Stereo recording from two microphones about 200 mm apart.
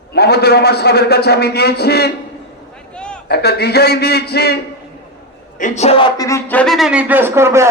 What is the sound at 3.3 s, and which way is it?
A man's voice, 55° left (ahead or behind).